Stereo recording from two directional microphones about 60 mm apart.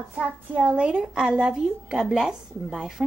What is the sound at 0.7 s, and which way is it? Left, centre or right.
A woman's voice, centre.